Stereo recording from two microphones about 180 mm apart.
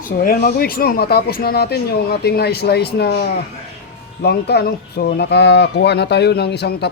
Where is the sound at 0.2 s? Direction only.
55° left (ahead or behind).